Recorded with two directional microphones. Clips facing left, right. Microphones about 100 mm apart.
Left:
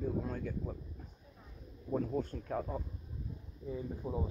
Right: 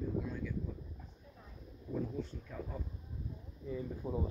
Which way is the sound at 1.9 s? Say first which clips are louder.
Left 4 dB; 55° left (ahead or behind).